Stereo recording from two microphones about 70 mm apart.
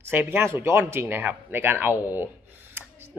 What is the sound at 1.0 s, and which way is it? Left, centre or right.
A woman's voice, right.